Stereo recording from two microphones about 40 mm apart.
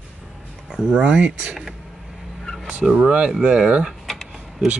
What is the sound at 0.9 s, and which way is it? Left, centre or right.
Speech, right.